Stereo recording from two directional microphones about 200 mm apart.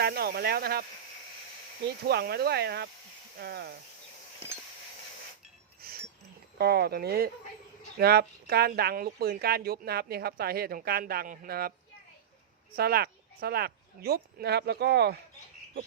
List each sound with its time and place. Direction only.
0.0 s speech: 50° right (ahead or behind)
2.0 s speech: 50° right (ahead or behind)
6.6 s speech: 50° right (ahead or behind)
12.7 s speech: 50° right (ahead or behind)